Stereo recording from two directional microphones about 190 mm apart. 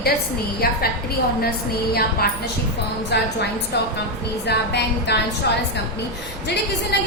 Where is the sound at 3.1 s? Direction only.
60° left (ahead or behind).